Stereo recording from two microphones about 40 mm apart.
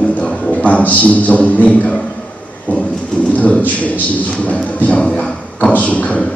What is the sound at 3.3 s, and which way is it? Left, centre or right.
Speech, left.